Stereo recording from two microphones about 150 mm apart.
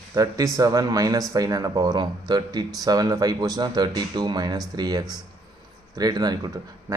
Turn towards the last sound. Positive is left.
turn(degrees=-25)  # may be behind; listen again after turning